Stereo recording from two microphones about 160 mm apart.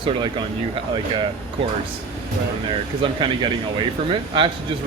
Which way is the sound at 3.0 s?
30° right (ahead or behind).